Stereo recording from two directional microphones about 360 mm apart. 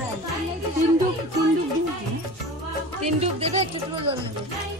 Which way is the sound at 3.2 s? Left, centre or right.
Centre.